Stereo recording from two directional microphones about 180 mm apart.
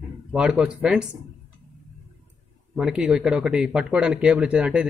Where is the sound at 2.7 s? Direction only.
5° right (ahead or behind).